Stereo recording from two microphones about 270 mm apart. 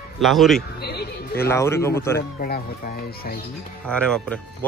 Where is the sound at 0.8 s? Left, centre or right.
Left.